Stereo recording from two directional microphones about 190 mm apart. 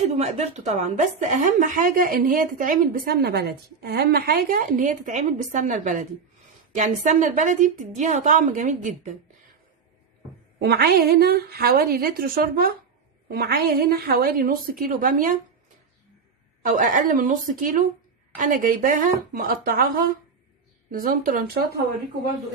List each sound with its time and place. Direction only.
0.1 s a woman's voice: 35° right (ahead or behind)
10.6 s a woman's voice: 55° right (ahead or behind)
16.6 s a woman's voice: 45° right (ahead or behind)